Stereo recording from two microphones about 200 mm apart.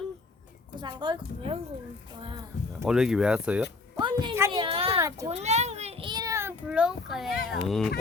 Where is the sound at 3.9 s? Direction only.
20° right (ahead or behind).